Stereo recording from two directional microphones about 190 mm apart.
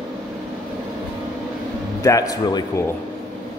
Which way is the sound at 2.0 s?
20° left (ahead or behind).